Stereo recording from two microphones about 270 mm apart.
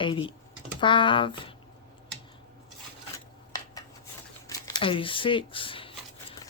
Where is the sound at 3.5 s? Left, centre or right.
Centre.